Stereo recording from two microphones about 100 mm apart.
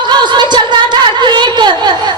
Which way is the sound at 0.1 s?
45° right (ahead or behind).